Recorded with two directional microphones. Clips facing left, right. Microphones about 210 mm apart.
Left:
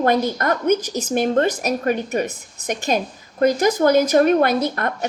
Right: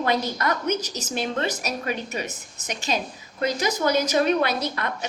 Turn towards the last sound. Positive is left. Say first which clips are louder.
# left 6 dB
turn(degrees=50)  # may be behind; listen again after turning